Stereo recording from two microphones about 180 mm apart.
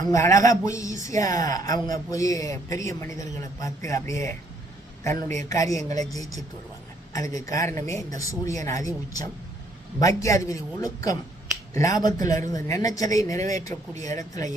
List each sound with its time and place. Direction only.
0.0 s speech: 15° left (ahead or behind)
5.5 s speech: 20° left (ahead or behind)
7.1 s speech: 20° left (ahead or behind)